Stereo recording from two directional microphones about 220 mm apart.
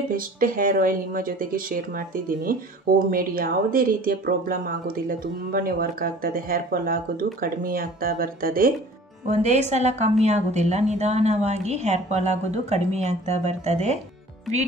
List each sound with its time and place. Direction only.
0.1 s a woman's voice: 40° right (ahead or behind)
9.3 s a woman's voice: 30° right (ahead or behind)